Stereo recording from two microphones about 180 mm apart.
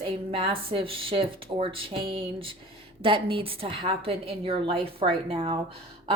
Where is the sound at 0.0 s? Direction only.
30° right (ahead or behind).